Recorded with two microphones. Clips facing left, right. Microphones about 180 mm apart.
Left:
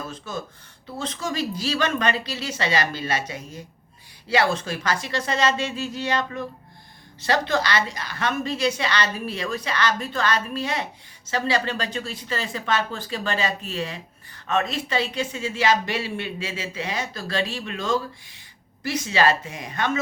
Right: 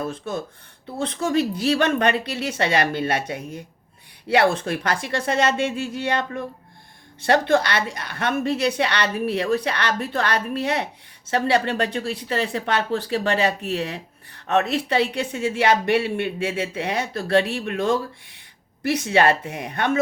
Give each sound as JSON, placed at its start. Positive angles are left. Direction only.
{"t": 0.9, "sound": "speech", "side_deg": -60}